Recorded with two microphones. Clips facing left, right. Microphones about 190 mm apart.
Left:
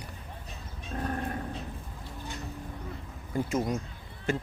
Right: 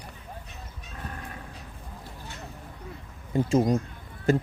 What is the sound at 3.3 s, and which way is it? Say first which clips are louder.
Speech: right 7 dB; 30° right (ahead or behind).